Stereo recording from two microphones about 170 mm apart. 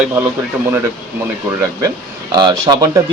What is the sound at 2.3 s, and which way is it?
Speech, 25° right (ahead or behind).